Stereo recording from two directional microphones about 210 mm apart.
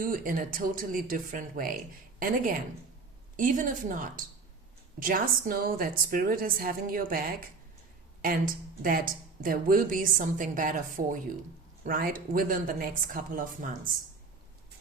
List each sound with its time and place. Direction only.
0.0 s a woman's voice: 40° right (ahead or behind)